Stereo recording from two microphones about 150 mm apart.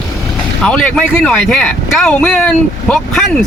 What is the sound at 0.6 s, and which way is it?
Speech, 5° left (ahead or behind).